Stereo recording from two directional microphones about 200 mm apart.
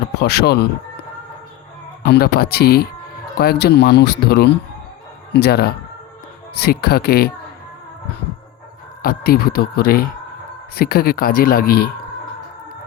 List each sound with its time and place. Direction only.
0.1 s speech: 55° left (ahead or behind)
2.0 s speech: 50° left (ahead or behind)
9.0 s speech: 50° left (ahead or behind)